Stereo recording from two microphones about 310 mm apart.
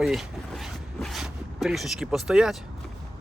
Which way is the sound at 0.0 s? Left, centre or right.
Centre.